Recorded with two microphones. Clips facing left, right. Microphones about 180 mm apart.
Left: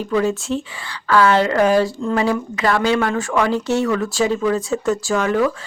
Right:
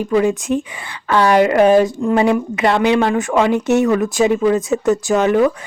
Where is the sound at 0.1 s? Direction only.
15° right (ahead or behind).